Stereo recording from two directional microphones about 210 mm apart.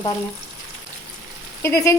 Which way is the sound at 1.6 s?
15° left (ahead or behind).